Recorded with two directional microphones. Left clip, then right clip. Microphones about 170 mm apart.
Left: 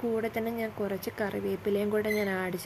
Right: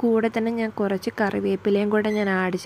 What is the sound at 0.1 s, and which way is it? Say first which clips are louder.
Speech: right 9 dB; 25° right (ahead or behind).